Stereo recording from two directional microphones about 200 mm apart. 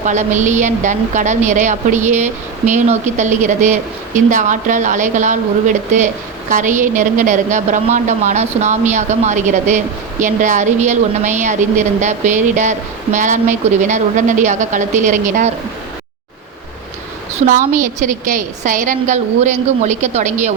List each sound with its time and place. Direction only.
0.0 s a woman's voice: 35° right (ahead or behind)
17.4 s a woman's voice: 40° right (ahead or behind)